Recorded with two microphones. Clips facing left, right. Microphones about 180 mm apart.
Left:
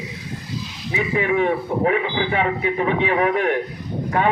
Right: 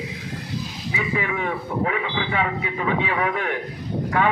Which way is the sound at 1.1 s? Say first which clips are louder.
Left 9 dB; 30° left (ahead or behind).